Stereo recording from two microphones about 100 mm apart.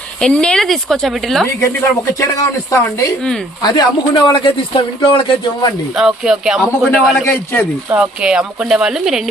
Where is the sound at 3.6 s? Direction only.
40° left (ahead or behind).